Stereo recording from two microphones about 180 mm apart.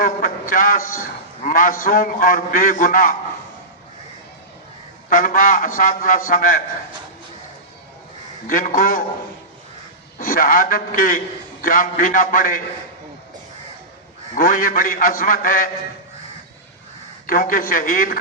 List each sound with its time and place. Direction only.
0.0 s a man's voice: 50° left (ahead or behind)
5.0 s a man's voice: 50° left (ahead or behind)
8.4 s a man's voice: 50° left (ahead or behind)
10.2 s a man's voice: 50° left (ahead or behind)
14.3 s a man's voice: 50° left (ahead or behind)
17.2 s a man's voice: 50° left (ahead or behind)